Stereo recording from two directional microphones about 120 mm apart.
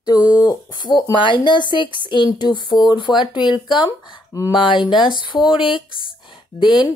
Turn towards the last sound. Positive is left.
turn(degrees=40)  # may be behind; listen again after turning